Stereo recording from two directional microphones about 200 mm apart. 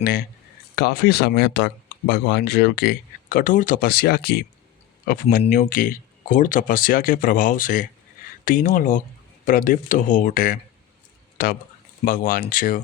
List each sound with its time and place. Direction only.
0.0 s speech: 50° left (ahead or behind)